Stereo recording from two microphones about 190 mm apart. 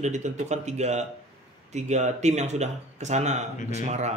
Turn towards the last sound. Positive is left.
turn(degrees=-35)  # may be behind; listen again after turning